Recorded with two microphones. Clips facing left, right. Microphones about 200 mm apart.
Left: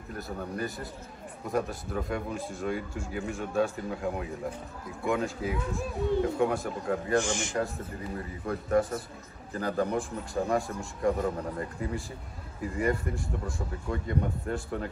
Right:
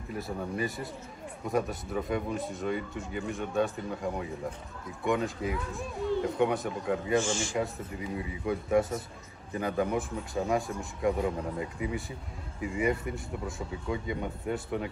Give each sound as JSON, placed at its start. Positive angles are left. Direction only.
{"t": 0.1, "sound": "speech", "side_deg": 0}
{"t": 7.2, "sound": "a man's voice", "side_deg": 15}
{"t": 8.2, "sound": "speech", "side_deg": -5}
{"t": 13.1, "sound": "speech", "side_deg": -20}
{"t": 13.6, "sound": "speech", "side_deg": 0}